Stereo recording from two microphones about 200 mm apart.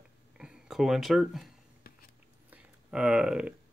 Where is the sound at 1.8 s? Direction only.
50° left (ahead or behind).